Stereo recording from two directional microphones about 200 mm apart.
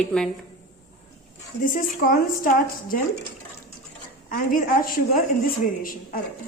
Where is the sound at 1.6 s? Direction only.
45° left (ahead or behind).